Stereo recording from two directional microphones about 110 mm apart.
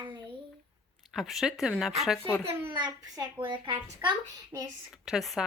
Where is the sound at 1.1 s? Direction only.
Centre (ahead or behind).